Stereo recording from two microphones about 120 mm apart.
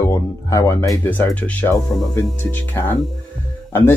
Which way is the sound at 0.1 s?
25° left (ahead or behind).